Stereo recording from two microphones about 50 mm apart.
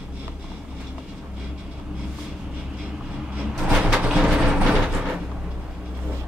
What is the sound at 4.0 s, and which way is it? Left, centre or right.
Vehicle, right.